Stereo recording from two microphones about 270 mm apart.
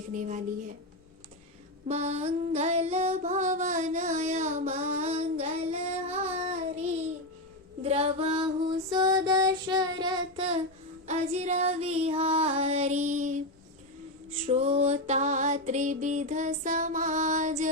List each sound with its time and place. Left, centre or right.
0.1 s music: right
1.9 s female singing: right
8.9 s child singing: centre
11.0 s music: right
14.4 s music: right